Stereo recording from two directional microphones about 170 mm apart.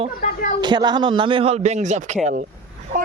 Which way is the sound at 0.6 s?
25° right (ahead or behind).